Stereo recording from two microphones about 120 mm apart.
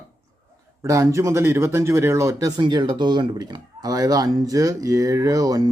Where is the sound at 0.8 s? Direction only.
25° right (ahead or behind).